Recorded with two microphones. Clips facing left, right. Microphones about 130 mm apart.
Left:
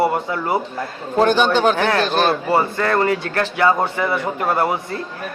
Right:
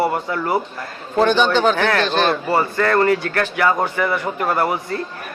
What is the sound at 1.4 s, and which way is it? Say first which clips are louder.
Speech: even; 10° left (ahead or behind).